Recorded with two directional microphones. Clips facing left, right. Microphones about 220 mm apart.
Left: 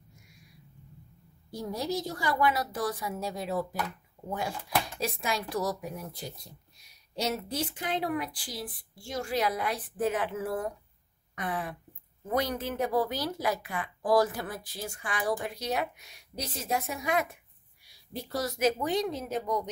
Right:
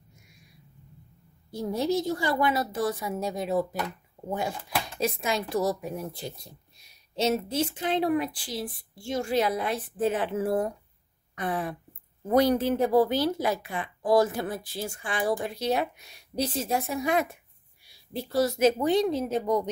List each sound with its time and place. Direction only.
1.6 s speech: 25° right (ahead or behind)
5.0 s speech: 20° right (ahead or behind)